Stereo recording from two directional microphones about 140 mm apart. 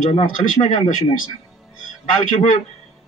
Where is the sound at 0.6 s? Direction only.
60° left (ahead or behind).